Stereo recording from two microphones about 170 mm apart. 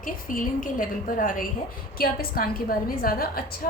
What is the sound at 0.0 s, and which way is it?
A woman's voice, 55° left (ahead or behind).